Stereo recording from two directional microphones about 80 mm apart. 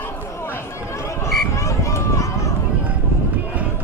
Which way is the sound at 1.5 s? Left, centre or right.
Left.